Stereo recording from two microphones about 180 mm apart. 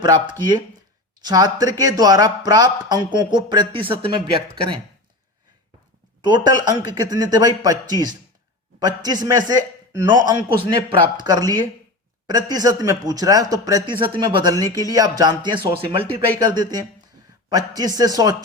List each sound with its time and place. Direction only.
0.0 s speech: 25° right (ahead or behind)
6.2 s speech: 25° right (ahead or behind)